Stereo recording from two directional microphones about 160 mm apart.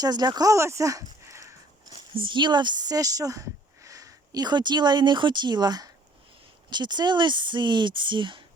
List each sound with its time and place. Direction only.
0.0 s speech: 25° right (ahead or behind)
2.1 s speech: 30° right (ahead or behind)